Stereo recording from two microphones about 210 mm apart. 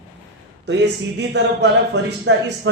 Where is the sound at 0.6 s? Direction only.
55° right (ahead or behind).